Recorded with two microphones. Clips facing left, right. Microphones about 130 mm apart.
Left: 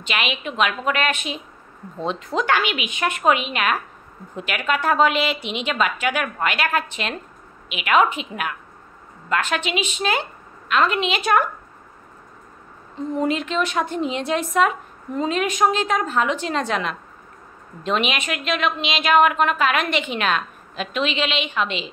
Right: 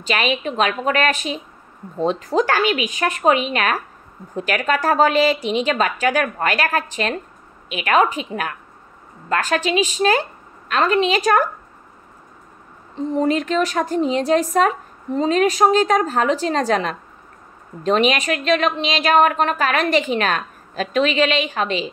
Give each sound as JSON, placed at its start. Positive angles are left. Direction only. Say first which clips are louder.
{"t": 0.0, "sound": "a woman's voice", "louder": "right 5 dB", "side_deg": -35}
{"t": 13.1, "sound": "a woman's voice", "louder": "right 4 dB", "side_deg": -35}